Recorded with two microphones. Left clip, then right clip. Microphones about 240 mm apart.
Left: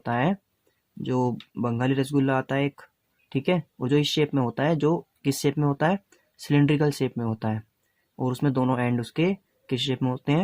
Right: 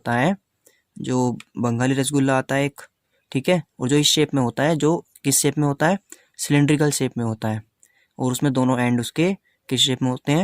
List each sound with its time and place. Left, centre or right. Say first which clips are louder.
0.0 s speech: right 5 dB; right